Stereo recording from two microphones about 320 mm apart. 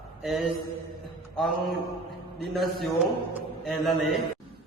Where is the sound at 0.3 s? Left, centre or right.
Centre.